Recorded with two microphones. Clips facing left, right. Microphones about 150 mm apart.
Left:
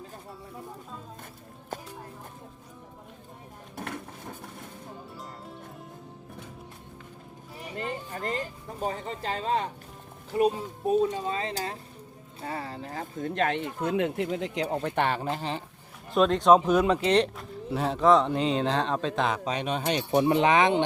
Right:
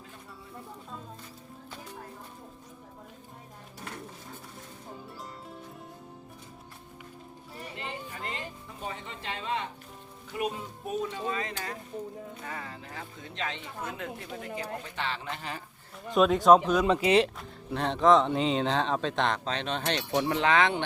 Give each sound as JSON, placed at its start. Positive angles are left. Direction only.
{"t": 1.7, "sound": "music", "side_deg": 45}
{"t": 7.8, "sound": "speech", "side_deg": 40}
{"t": 15.3, "sound": "speech", "side_deg": 30}
{"t": 16.1, "sound": "speech", "side_deg": -5}